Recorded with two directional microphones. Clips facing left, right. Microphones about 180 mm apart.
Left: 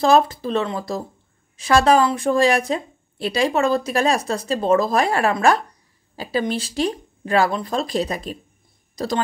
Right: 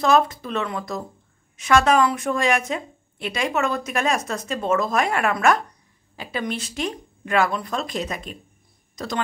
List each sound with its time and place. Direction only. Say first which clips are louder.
0.0 s a woman's voice: left 3 dB; 30° left (ahead or behind)